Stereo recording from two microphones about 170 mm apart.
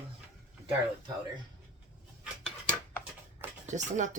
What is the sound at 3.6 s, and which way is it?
Speech, 45° right (ahead or behind).